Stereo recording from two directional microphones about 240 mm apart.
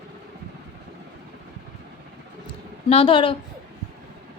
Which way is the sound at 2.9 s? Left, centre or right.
Left.